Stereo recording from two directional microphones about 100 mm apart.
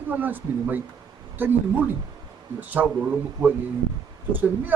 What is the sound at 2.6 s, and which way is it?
Speech, 15° right (ahead or behind).